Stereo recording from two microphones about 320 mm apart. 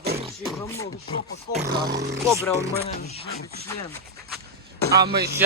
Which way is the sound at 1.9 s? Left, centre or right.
Right.